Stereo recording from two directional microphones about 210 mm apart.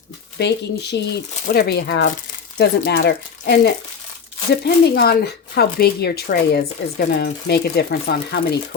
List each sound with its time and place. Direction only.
0.3 s speech: 55° left (ahead or behind)